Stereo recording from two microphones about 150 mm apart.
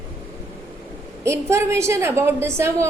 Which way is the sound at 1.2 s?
20° right (ahead or behind).